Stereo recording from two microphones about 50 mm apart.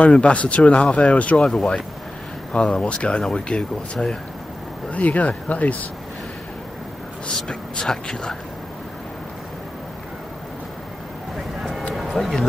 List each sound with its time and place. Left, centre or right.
0.0 s speech: left
1.4 s speech: centre
4.9 s speech: left
7.4 s speech: centre
11.9 s a sound: centre